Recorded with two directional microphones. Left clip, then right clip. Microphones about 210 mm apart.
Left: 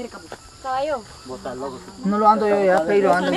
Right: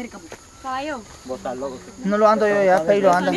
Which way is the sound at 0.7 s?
50° right (ahead or behind).